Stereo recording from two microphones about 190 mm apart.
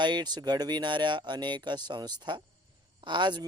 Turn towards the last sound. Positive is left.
turn(degrees=-25)  # may be behind; listen again after turning